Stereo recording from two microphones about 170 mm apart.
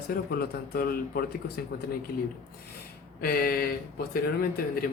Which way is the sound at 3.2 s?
60° left (ahead or behind).